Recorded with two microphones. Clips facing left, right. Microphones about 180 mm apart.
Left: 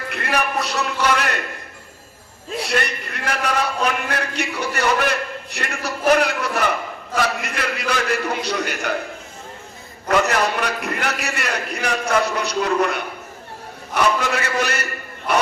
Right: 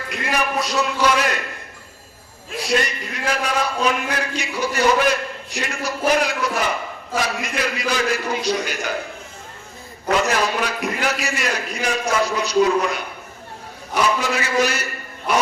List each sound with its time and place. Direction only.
0.1 s a man's voice: 60° left (ahead or behind)
2.6 s a man's voice: 60° left (ahead or behind)
10.1 s a man's voice: 60° left (ahead or behind)